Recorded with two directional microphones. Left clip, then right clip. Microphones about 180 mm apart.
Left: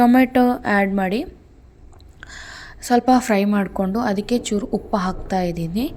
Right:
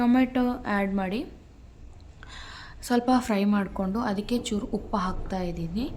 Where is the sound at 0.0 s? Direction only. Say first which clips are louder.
Left 9 dB; 35° left (ahead or behind).